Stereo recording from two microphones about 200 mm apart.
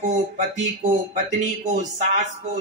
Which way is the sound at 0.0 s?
35° right (ahead or behind).